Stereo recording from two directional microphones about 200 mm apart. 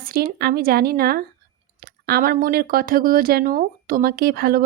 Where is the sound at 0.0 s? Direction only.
50° right (ahead or behind).